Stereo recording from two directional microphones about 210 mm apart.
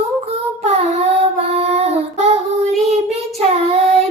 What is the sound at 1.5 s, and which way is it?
Child singing, 30° right (ahead or behind).